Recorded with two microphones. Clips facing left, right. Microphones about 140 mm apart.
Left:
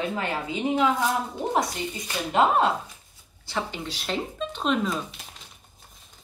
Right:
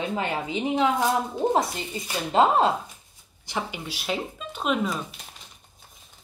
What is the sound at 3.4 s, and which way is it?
Speech, 15° right (ahead or behind).